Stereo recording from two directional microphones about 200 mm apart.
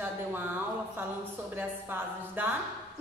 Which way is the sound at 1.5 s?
10° right (ahead or behind).